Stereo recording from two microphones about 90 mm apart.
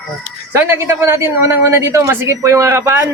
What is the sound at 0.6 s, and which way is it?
Speech, 30° right (ahead or behind).